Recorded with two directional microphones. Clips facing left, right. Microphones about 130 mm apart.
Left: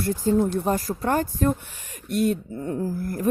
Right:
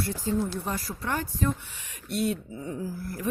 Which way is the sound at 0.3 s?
45° left (ahead or behind).